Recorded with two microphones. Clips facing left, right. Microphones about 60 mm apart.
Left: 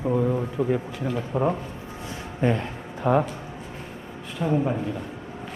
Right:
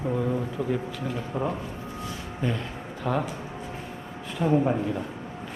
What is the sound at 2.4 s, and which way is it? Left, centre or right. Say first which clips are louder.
Speech: left 6 dB; left.